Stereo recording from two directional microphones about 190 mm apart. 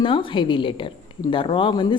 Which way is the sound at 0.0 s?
25° left (ahead or behind).